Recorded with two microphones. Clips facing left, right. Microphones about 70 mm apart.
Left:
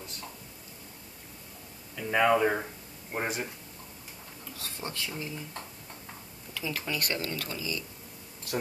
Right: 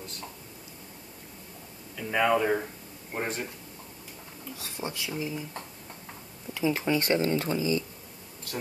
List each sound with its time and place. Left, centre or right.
2.0 s speech: centre
4.6 s speech: centre
6.5 s speech: right